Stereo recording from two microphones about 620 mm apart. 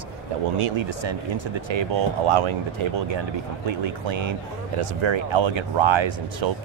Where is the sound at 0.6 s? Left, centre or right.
Right.